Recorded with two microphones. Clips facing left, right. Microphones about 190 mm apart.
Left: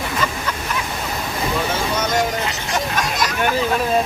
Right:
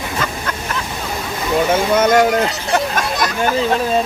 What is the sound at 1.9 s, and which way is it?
Speech, 60° right (ahead or behind).